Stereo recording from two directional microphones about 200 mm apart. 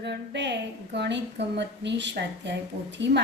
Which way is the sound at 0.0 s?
60° right (ahead or behind).